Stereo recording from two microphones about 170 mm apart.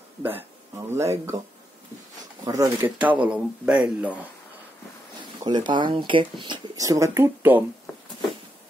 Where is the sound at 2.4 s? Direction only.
20° right (ahead or behind).